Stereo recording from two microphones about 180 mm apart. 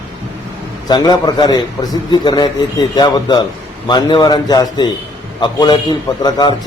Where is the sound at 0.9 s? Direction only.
25° left (ahead or behind).